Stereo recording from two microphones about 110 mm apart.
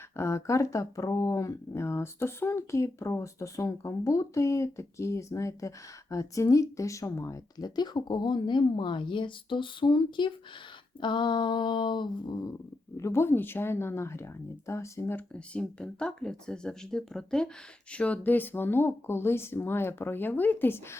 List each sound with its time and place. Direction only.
0.2 s speech: 25° left (ahead or behind); by 10.3 s 45° left (ahead or behind)
11.0 s a sound: 45° left (ahead or behind)
13.0 s speech: 25° left (ahead or behind)
15.5 s speech: 10° left (ahead or behind)